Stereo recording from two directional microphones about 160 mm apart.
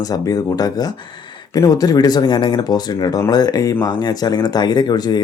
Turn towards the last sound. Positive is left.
turn(degrees=25)  # may be behind; listen again after turning